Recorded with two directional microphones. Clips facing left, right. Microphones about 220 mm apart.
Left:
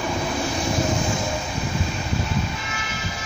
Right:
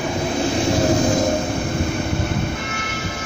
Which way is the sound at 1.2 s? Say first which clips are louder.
Right 8 dB; 50° right (ahead or behind).